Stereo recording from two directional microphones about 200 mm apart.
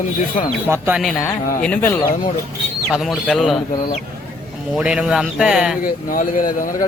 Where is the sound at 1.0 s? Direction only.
Centre (ahead or behind).